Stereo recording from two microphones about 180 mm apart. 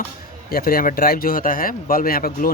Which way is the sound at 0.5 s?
55° left (ahead or behind).